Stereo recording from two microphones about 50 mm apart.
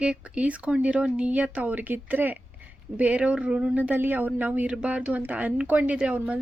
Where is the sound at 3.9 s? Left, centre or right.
Right.